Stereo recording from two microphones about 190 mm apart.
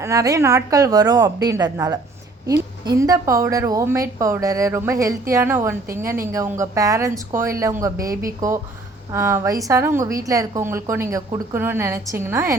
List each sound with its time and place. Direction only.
0.0 s a woman's voice: 15° right (ahead or behind)